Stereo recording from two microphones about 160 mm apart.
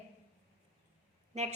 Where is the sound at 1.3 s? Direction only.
45° right (ahead or behind).